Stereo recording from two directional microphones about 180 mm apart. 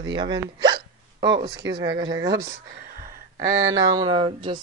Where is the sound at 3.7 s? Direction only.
20° right (ahead or behind).